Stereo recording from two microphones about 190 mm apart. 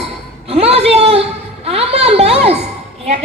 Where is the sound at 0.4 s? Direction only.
30° right (ahead or behind).